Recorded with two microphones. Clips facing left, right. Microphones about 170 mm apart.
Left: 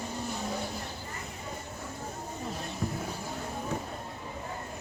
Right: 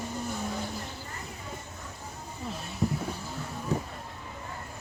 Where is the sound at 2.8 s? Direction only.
20° right (ahead or behind).